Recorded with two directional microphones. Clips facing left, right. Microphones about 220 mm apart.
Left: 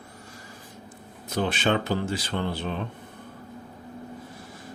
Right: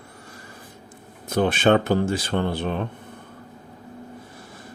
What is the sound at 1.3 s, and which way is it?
Speech, 50° right (ahead or behind).